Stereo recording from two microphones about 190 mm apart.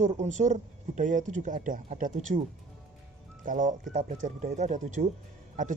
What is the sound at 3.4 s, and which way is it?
Speech, 40° right (ahead or behind).